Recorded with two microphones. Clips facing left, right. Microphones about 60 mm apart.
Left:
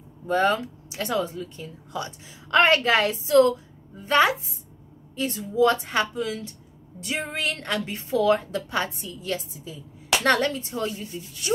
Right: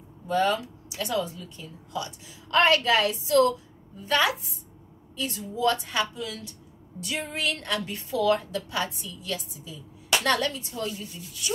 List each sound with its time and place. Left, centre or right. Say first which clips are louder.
0.3 s speech: left 2 dB; left